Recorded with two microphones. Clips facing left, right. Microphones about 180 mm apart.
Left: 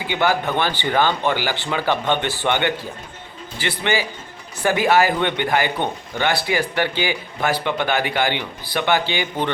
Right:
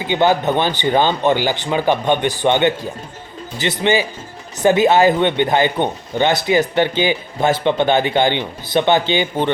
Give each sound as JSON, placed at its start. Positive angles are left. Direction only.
{"t": 0.0, "sound": "speech", "side_deg": -20}